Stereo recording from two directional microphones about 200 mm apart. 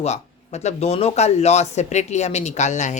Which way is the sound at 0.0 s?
35° left (ahead or behind).